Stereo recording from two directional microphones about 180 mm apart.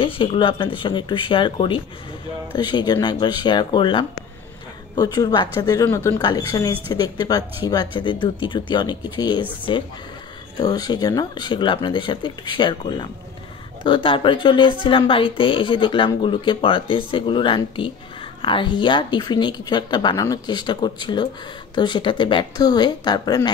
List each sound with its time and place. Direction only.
0.0 s speech: 30° left (ahead or behind)